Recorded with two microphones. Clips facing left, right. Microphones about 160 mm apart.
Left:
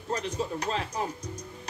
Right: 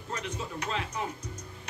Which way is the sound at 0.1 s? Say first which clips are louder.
Left 6 dB; 35° left (ahead or behind).